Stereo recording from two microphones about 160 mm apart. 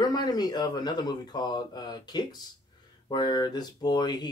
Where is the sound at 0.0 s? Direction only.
25° left (ahead or behind).